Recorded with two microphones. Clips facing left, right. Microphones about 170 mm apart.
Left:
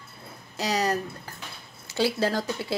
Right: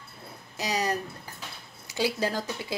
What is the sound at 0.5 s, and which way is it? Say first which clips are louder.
A woman's voice: left 3 dB; 15° right (ahead or behind).